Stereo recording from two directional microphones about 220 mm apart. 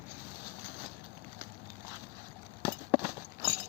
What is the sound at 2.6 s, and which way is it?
Clip-clop, 10° right (ahead or behind).